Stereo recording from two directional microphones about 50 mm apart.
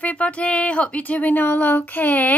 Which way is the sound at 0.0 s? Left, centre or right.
Left.